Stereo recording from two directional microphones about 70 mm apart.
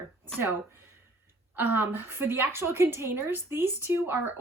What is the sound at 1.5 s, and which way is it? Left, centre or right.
A woman's voice, right.